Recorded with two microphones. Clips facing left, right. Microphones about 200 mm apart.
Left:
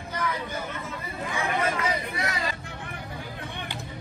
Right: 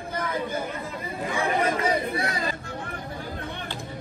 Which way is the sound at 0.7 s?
30° right (ahead or behind).